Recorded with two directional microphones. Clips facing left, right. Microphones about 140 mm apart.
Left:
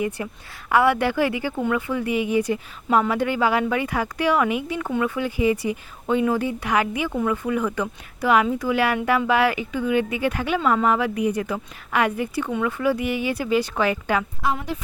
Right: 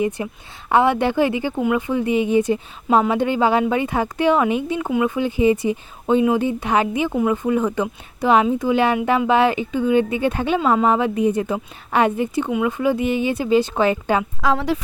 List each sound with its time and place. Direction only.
0.2 s speech: 20° right (ahead or behind)
14.4 s a woman's voice: 90° right